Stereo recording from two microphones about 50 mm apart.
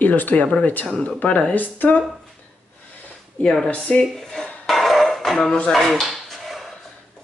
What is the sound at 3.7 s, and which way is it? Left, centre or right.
Speech, left.